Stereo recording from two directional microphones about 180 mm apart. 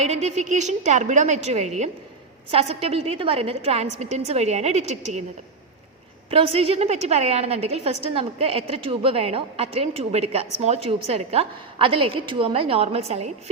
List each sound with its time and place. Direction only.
0.0 s a woman's voice: 40° right (ahead or behind)
6.3 s a woman's voice: 30° right (ahead or behind)